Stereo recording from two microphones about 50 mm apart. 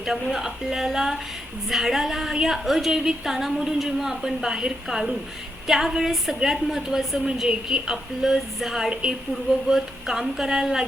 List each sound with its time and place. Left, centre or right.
0.0 s a woman's voice: centre